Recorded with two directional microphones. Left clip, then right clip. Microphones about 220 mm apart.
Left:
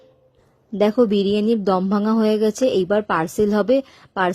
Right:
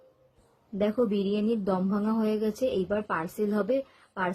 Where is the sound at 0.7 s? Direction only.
40° left (ahead or behind).